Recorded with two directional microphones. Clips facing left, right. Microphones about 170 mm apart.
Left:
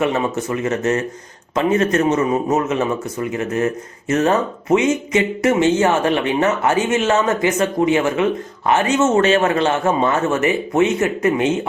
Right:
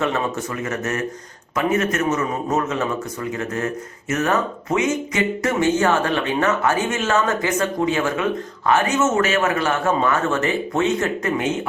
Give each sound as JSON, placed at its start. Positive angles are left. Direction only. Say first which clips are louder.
{"t": 0.0, "sound": "speech", "louder": "left 3 dB", "side_deg": 20}